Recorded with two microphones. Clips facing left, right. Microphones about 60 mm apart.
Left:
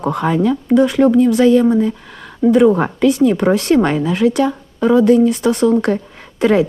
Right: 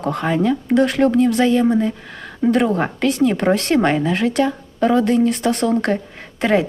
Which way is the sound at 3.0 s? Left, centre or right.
Right.